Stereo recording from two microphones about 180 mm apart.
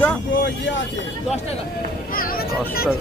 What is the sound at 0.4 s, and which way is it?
Vehicle, 90° left.